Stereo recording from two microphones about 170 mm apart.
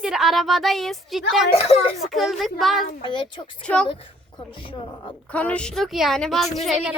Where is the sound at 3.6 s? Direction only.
5° left (ahead or behind).